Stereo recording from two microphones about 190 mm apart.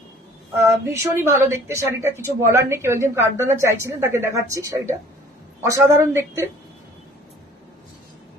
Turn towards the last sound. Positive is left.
turn(degrees=-15)  # may be behind; listen again after turning